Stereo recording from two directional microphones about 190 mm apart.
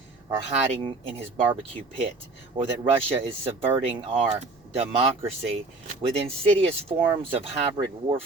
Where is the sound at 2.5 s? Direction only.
30° right (ahead or behind).